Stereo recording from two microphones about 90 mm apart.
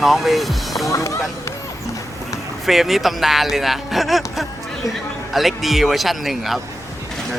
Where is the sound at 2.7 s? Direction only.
Centre (ahead or behind).